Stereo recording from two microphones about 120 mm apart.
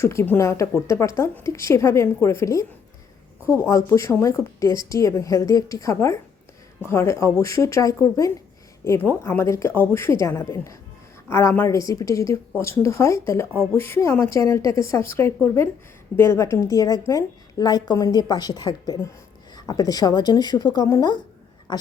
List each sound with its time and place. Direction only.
0.0 s speech: 20° left (ahead or behind)
8.8 s speech: 15° left (ahead or behind); by 21.8 s 40° left (ahead or behind)